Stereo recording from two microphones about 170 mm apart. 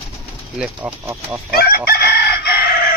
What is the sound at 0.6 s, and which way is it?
Speech, 10° right (ahead or behind).